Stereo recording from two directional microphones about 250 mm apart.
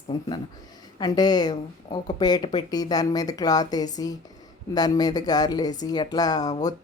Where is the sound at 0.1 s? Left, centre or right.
Centre.